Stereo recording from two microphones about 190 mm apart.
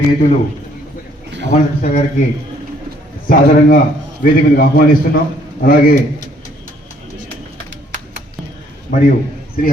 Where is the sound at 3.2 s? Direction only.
45° left (ahead or behind).